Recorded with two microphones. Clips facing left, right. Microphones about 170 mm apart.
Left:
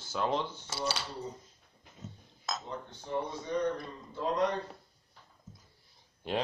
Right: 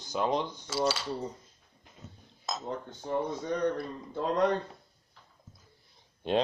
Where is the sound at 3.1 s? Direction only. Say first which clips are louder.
Right 3 dB; 50° right (ahead or behind).